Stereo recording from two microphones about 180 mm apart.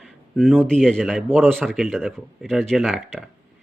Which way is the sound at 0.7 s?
Centre (ahead or behind).